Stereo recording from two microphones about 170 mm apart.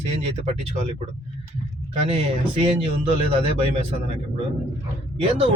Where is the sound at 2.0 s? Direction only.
35° right (ahead or behind).